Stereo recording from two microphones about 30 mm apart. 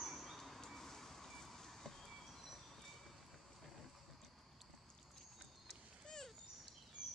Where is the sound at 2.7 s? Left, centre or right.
Centre.